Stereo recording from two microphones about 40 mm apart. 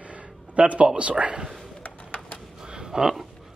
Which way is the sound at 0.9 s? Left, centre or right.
Right.